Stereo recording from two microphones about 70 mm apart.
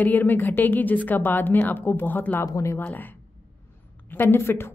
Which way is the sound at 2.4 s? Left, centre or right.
Left.